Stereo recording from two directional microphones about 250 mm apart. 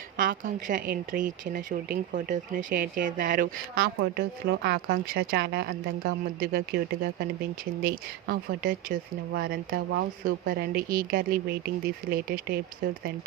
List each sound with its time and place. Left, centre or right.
0.2 s speech: right